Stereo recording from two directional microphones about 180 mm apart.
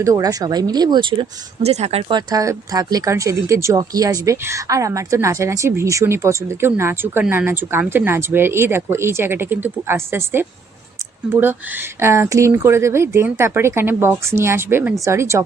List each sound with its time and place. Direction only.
0.0 s speech: 20° right (ahead or behind)